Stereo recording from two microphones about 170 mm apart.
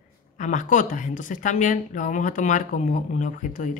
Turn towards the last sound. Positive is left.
turn(degrees=50)  # may be behind; listen again after turning